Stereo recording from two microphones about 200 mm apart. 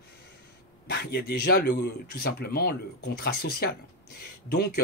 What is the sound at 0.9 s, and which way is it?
Speech, 55° left (ahead or behind).